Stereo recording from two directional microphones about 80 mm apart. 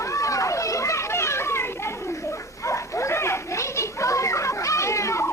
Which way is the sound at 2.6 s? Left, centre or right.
Left.